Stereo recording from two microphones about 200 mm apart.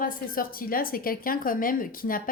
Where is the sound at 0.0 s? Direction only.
45° left (ahead or behind).